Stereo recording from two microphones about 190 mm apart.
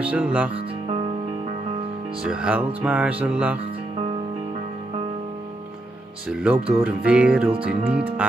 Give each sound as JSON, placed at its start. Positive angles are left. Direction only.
{"t": 0.0, "sound": "speech", "side_deg": -5}
{"t": 0.6, "sound": "music", "side_deg": -30}
{"t": 2.2, "sound": "speech", "side_deg": -5}
{"t": 6.2, "sound": "speech", "side_deg": -5}